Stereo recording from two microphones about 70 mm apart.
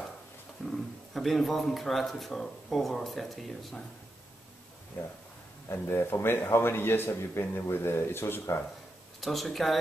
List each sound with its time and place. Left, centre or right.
0.7 s speech: centre
5.0 s a man's voice: left
9.2 s speech: centre